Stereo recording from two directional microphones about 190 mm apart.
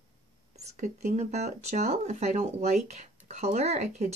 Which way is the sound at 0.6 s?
35° right (ahead or behind).